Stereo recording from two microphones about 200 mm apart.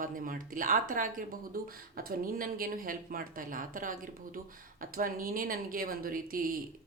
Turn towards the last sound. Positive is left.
turn(degrees=-45)  # may be behind; listen again after turning